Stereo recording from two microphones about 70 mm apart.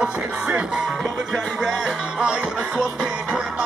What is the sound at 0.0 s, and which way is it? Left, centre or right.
Music, centre.